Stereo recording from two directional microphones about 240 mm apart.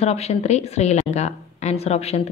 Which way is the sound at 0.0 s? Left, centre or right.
Left.